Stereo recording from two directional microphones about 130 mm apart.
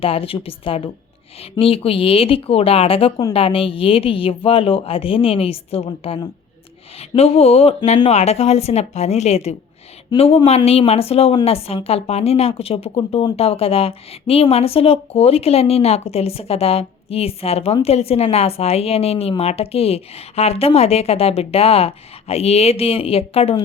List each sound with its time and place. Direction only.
0.0 s a woman's voice: 45° left (ahead or behind)
7.2 s a woman's voice: 50° left (ahead or behind)